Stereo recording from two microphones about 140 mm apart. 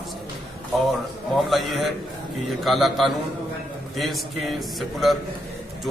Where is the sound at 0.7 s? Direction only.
Centre (ahead or behind).